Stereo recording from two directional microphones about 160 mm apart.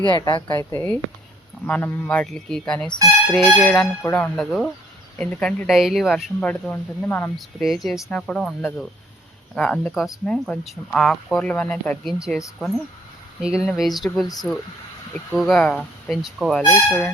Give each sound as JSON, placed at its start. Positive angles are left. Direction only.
{"t": 0.0, "sound": "a woman's voice", "side_deg": 30}
{"t": 0.7, "sound": "speech", "side_deg": 15}
{"t": 4.4, "sound": "speech", "side_deg": 0}
{"t": 6.4, "sound": "speech", "side_deg": 10}
{"t": 7.3, "sound": "speech", "side_deg": 0}
{"t": 13.4, "sound": "speech", "side_deg": -5}